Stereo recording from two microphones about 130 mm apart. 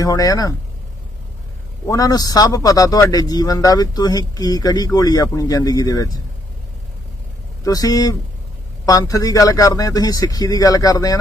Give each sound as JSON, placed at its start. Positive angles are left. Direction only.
{"t": 0.0, "sound": "a man's voice", "side_deg": 25}
{"t": 1.9, "sound": "a man's voice", "side_deg": 30}
{"t": 7.6, "sound": "a man's voice", "side_deg": 30}